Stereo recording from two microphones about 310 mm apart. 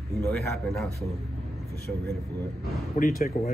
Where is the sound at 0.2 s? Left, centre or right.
Centre.